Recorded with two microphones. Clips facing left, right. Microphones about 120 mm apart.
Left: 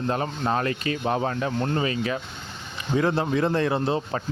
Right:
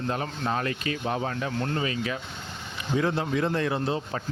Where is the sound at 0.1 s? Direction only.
40° left (ahead or behind).